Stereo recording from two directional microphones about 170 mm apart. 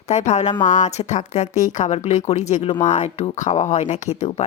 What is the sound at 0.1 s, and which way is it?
Speech, 40° left (ahead or behind).